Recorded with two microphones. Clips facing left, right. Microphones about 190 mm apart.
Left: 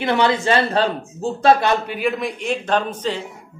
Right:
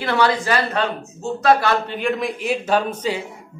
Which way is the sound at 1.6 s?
20° left (ahead or behind).